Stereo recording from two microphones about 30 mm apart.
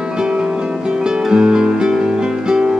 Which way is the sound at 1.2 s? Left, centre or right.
Right.